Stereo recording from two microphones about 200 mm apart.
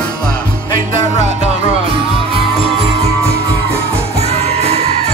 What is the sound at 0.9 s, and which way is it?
Music, 40° right (ahead or behind).